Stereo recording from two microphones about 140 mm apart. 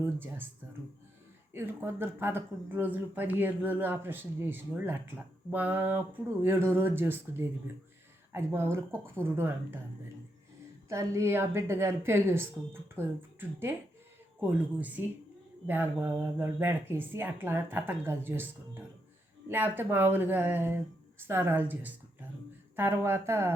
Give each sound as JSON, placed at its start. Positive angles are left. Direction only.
{"t": 0.0, "sound": "speech", "side_deg": -15}
{"t": 1.5, "sound": "speech", "side_deg": -15}
{"t": 10.8, "sound": "speech", "side_deg": -20}